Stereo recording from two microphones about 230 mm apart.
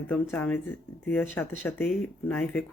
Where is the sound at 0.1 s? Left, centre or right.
Centre.